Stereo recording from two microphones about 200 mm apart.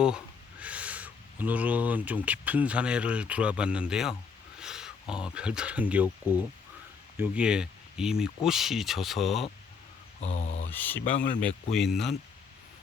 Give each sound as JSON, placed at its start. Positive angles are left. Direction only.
{"t": 0.6, "sound": "speech", "side_deg": -5}
{"t": 4.6, "sound": "a sound", "side_deg": -5}
{"t": 5.1, "sound": "speech", "side_deg": -5}
{"t": 10.2, "sound": "speech", "side_deg": 35}
{"t": 10.7, "sound": "speech", "side_deg": 10}
{"t": 11.0, "sound": "speech", "side_deg": 40}
{"t": 11.3, "sound": "speech", "side_deg": 5}